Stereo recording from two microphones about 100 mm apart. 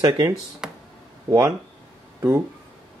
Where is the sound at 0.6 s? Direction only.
5° right (ahead or behind).